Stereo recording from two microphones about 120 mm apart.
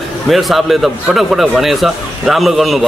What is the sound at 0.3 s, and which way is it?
Speech, centre (ahead or behind).